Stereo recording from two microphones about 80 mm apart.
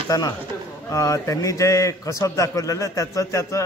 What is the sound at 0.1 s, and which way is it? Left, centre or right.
A man's voice, left.